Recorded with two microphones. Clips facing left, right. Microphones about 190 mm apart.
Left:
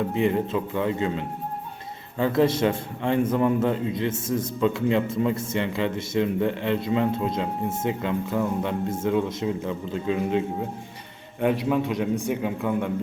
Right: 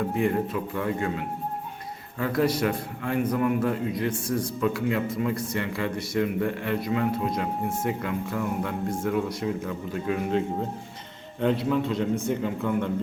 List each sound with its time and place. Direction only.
0.1 s a man's voice: 20° left (ahead or behind)